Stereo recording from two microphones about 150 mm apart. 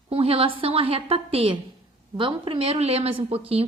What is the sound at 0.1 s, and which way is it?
A woman's voice, 40° right (ahead or behind).